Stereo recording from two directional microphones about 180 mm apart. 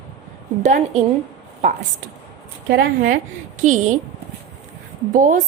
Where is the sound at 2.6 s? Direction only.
55° right (ahead or behind).